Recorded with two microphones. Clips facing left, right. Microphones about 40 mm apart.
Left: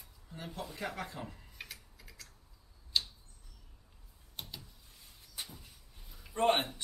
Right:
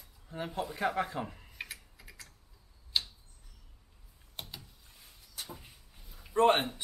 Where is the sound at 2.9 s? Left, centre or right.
Centre.